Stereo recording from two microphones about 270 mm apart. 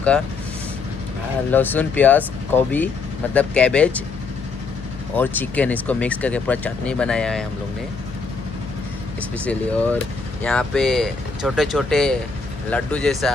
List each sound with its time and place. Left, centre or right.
1.5 s speech: centre
5.1 s speech: centre
9.4 s speech: centre